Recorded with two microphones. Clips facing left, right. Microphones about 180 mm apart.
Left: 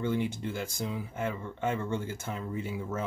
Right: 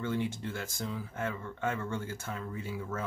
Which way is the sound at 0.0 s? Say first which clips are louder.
Left 3 dB; 15° left (ahead or behind).